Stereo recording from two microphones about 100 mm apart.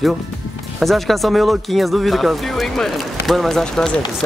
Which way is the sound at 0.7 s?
Centre (ahead or behind).